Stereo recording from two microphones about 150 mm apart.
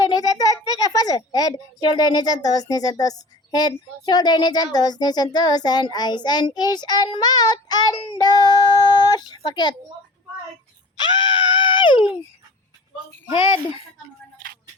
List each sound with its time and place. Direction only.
0.0 s a sound: 25° left (ahead or behind)
3.5 s speech: 25° left (ahead or behind)
10.9 s screaming: 30° left (ahead or behind)